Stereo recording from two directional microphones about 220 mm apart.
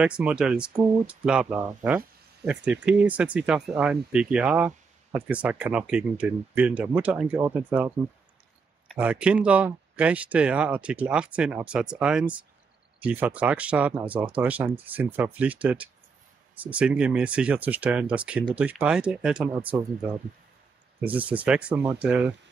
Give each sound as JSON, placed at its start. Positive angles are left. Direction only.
{"t": 0.0, "sound": "speech", "side_deg": -5}
{"t": 8.9, "sound": "speech", "side_deg": -5}